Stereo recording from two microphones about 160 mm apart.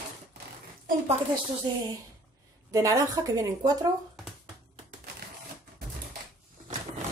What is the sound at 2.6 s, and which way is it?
A woman's voice, 20° right (ahead or behind).